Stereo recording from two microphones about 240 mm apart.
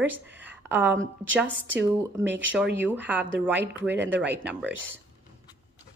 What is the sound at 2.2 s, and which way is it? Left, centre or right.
Speech, right.